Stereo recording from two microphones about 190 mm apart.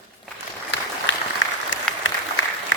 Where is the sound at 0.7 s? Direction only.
70° left (ahead or behind).